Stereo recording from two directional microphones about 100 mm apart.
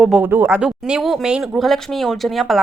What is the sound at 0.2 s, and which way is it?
Speech, 20° right (ahead or behind).